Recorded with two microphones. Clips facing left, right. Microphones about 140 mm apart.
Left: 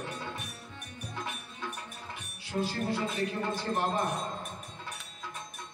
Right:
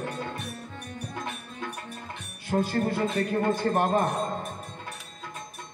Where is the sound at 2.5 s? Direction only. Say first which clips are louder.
Right 6 dB; 50° right (ahead or behind).